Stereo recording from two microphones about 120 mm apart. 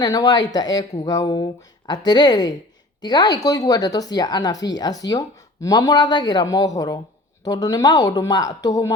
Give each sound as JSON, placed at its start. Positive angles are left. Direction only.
{"t": 0.0, "sound": "speech", "side_deg": 35}